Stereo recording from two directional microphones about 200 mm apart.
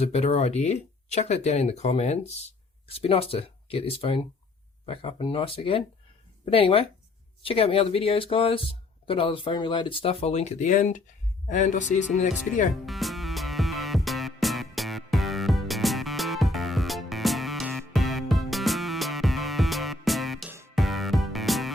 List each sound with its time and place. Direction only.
0.0 s speech: 30° left (ahead or behind)
12.7 s music: centre (ahead or behind)